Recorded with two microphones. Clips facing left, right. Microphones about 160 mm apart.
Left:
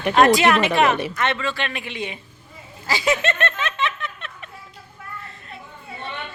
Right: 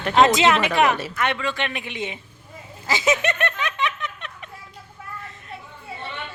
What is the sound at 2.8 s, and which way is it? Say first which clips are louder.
Snicker: even; 20° right (ahead or behind).